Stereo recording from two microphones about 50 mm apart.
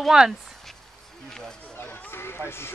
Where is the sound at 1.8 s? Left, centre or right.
Left.